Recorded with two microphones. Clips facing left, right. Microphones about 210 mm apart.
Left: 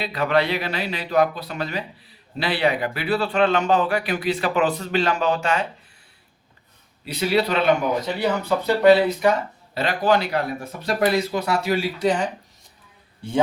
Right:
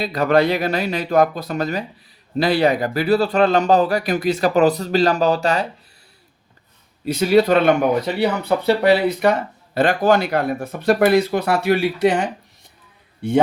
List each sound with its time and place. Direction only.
0.0 s speech: 40° right (ahead or behind)
7.0 s speech: 45° right (ahead or behind); by 12.3 s 60° right (ahead or behind)